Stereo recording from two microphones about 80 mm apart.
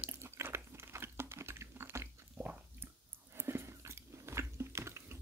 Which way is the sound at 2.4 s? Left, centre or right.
Right.